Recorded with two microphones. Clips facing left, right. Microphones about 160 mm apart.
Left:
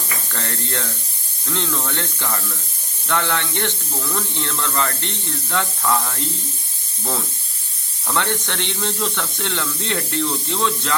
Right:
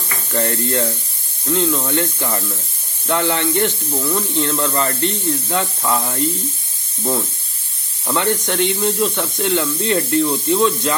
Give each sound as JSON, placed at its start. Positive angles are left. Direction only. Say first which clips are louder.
{"t": 0.3, "sound": "speech", "louder": "right 10 dB", "side_deg": -15}
{"t": 8.0, "sound": "speech", "louder": "right 4 dB", "side_deg": -15}